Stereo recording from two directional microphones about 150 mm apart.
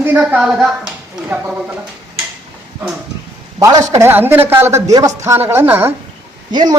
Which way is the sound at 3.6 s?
20° right (ahead or behind).